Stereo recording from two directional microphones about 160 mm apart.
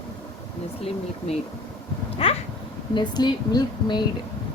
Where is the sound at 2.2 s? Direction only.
35° left (ahead or behind).